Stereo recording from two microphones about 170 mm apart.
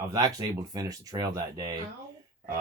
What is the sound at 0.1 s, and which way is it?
Speech, 20° right (ahead or behind).